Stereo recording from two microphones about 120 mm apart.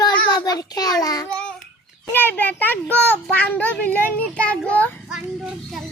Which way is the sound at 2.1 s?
15° left (ahead or behind).